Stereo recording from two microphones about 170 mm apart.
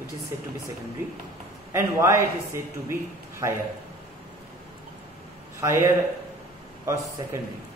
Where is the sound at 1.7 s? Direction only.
15° right (ahead or behind).